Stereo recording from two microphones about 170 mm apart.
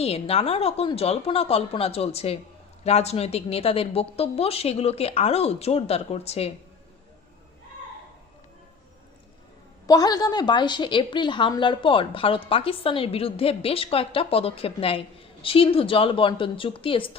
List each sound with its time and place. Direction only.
0.0 s a woman's voice: 35° left (ahead or behind)
9.8 s a woman's voice: 20° left (ahead or behind)